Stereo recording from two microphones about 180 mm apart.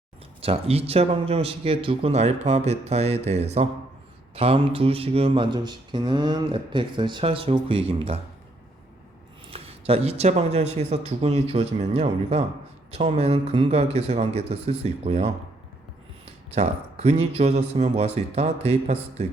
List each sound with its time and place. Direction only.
0.4 s speech: 35° right (ahead or behind)
9.5 s speech: 35° right (ahead or behind)
16.6 s speech: 35° right (ahead or behind)